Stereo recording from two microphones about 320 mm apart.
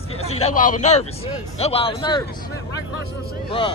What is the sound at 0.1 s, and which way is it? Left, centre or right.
A man's voice, centre.